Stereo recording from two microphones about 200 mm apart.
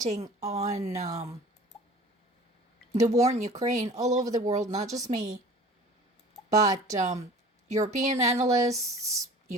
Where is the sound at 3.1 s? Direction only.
35° right (ahead or behind).